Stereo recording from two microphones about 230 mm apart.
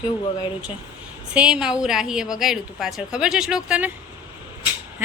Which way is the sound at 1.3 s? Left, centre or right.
Centre.